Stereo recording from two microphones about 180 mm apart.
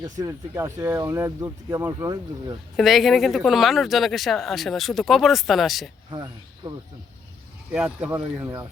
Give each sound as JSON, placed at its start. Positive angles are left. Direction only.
{"t": 0.0, "sound": "speech", "side_deg": -20}
{"t": 2.7, "sound": "speech", "side_deg": 0}
{"t": 7.7, "sound": "speech", "side_deg": -5}